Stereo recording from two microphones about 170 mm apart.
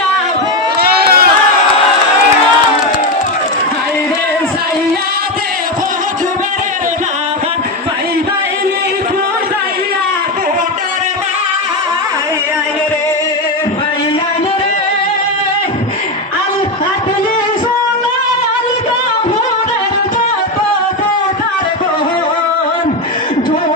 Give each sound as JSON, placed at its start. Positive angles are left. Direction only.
{"t": 0.8, "sound": "crowd", "side_deg": -65}